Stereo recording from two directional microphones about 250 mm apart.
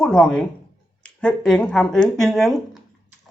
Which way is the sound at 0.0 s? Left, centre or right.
Centre.